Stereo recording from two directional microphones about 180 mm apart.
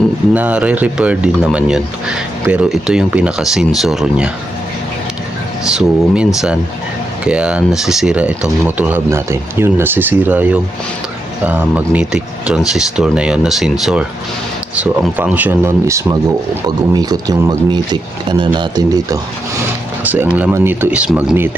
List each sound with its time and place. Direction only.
0.3 s speech: 5° right (ahead or behind)
5.6 s speech: 5° right (ahead or behind); by 19.2 s 20° right (ahead or behind)
20.3 s speech: 10° right (ahead or behind)